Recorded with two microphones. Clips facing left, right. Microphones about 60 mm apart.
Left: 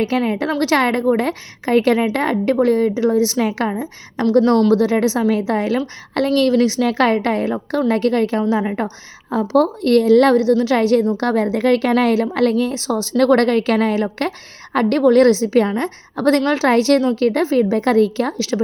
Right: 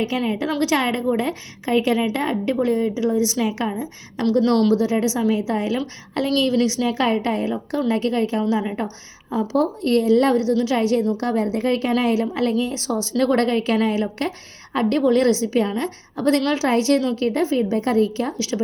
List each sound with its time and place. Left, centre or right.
0.1 s a woman's voice: left
4.7 s a woman's voice: left
8.4 s a woman's voice: left
9.6 s a woman's voice: left
10.5 s a woman's voice: left
10.8 s a woman's voice: left
11.2 s a woman's voice: left